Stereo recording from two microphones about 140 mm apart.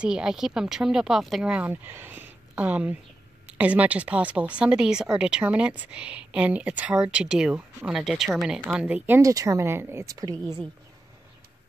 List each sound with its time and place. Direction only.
0.0 s speech: 5° right (ahead or behind)
9.3 s a woman's voice: 25° right (ahead or behind)